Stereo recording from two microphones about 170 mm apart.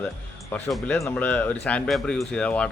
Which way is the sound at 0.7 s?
Centre (ahead or behind).